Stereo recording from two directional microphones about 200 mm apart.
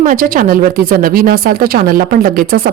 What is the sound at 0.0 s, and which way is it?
Speech, 45° right (ahead or behind).